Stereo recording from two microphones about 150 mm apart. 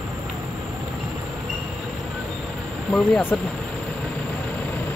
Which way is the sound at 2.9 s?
5° left (ahead or behind).